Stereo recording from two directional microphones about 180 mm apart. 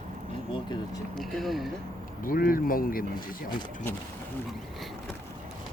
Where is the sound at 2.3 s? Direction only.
55° left (ahead or behind).